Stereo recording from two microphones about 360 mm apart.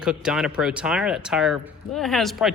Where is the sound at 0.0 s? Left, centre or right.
Centre.